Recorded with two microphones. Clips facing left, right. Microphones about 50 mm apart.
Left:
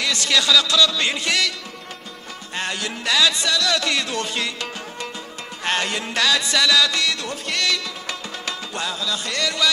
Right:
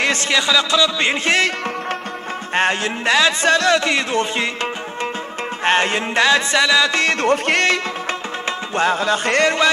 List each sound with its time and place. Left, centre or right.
0.0 s a man's voice: right
2.5 s speech: right
5.6 s music: right